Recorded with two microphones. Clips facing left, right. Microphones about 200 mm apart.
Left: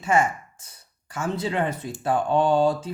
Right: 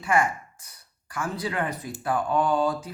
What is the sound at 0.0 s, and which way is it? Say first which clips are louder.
A woman's voice: left 2 dB; 25° left (ahead or behind).